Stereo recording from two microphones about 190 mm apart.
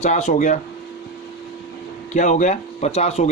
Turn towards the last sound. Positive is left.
turn(degrees=35)  # may be behind; listen again after turning